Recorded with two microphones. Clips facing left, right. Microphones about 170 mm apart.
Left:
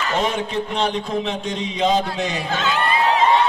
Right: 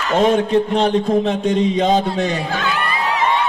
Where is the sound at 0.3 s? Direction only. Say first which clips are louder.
Right 9 dB; 45° right (ahead or behind).